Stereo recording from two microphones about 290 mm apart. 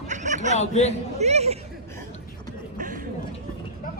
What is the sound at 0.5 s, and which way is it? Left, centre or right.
Speech, left.